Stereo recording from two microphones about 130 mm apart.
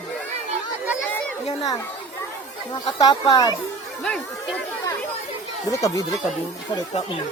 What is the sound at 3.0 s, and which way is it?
Speech, 30° left (ahead or behind).